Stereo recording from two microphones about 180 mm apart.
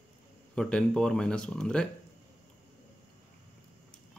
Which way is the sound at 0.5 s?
5° left (ahead or behind).